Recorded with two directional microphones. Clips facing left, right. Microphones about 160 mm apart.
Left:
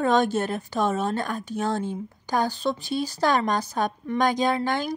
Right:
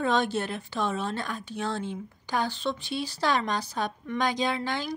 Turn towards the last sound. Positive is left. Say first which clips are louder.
# left 5 dB
turn(degrees=50)  # may be behind; listen again after turning